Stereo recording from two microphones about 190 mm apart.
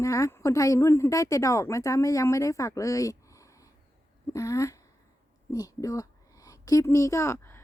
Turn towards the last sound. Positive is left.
turn(degrees=15)  # may be behind; listen again after turning